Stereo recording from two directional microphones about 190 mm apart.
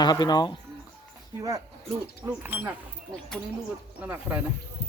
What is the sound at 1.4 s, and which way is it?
Speech, 15° right (ahead or behind).